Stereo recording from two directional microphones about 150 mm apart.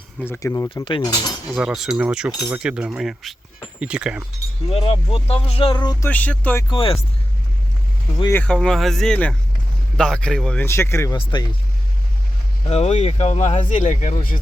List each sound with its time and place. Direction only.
0.3 s speech: 20° left (ahead or behind)
1.5 s speech: 5° right (ahead or behind)
4.7 s speech: 40° left (ahead or behind)
6.1 s speech: 10° left (ahead or behind)
6.7 s speech: 35° left (ahead or behind)
8.3 s speech: 10° left (ahead or behind)
8.5 s speech: centre (ahead or behind)
10.7 s speech: 15° left (ahead or behind)
12.6 s speech: 45° left (ahead or behind); by 14.3 s 65° left (ahead or behind)